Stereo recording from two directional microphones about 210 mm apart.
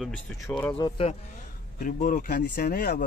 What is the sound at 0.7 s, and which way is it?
Speech, 25° left (ahead or behind).